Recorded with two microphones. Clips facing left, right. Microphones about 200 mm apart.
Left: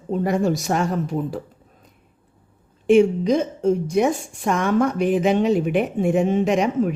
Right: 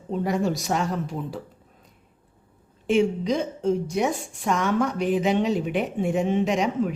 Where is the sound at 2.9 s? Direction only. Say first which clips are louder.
Left 6 dB; 50° left (ahead or behind).